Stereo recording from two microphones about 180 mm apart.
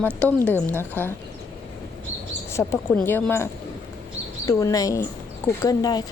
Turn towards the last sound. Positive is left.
turn(degrees=20)  # may be behind; listen again after turning